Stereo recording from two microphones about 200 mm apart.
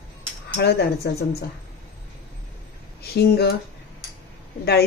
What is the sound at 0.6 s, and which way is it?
Speech, 55° left (ahead or behind).